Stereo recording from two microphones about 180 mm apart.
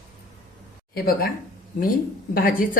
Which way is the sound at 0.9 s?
55° left (ahead or behind).